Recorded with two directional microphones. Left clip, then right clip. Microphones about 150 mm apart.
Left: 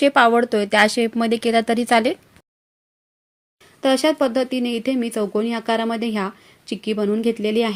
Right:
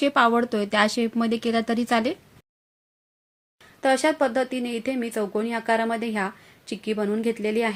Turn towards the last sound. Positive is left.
turn(degrees=35)  # may be behind; listen again after turning